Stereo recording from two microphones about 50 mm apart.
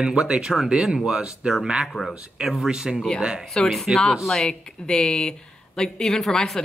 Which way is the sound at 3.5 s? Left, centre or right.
Centre.